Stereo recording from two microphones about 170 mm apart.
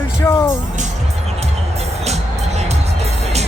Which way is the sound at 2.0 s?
40° right (ahead or behind).